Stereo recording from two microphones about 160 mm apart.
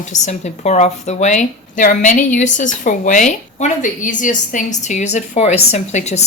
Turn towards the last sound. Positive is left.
turn(degrees=45)  # may be behind; listen again after turning